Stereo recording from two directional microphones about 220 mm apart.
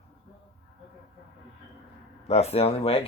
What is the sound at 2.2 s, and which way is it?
Speech, 30° left (ahead or behind).